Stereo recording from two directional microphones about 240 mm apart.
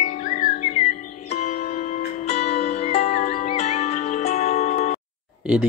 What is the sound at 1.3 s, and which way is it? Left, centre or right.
Music, left.